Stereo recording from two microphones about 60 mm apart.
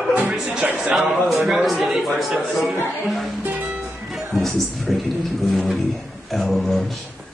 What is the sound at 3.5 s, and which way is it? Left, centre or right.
Music, right.